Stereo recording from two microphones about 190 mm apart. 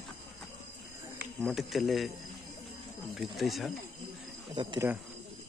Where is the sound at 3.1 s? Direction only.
Centre (ahead or behind).